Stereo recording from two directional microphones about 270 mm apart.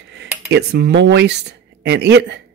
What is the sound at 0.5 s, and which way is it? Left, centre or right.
Speech, right.